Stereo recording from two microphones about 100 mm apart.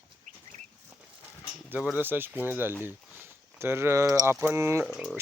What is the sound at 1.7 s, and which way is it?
Speech, 15° right (ahead or behind).